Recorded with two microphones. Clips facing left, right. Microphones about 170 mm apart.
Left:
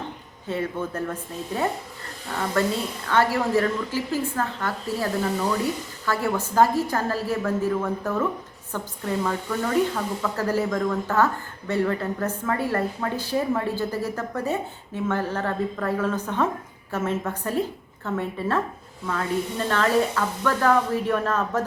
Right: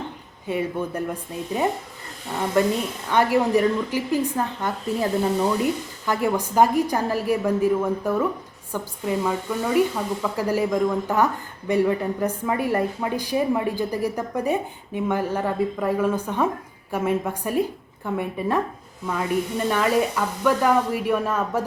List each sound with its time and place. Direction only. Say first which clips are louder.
0.4 s a woman's voice: right 2 dB; 15° right (ahead or behind)